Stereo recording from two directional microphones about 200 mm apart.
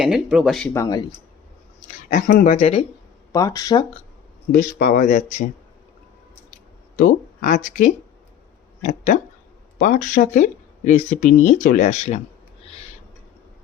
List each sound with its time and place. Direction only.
0.0 s speech: 5° right (ahead or behind)
0.7 s speech: 15° left (ahead or behind)
2.1 s speech: 45° left (ahead or behind)
3.3 s speech: 15° left (ahead or behind)
4.5 s speech: 45° left (ahead or behind)
6.9 s speech: 40° left (ahead or behind)